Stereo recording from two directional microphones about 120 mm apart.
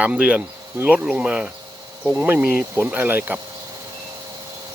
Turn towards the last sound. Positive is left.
turn(degrees=-15)  # may be behind; listen again after turning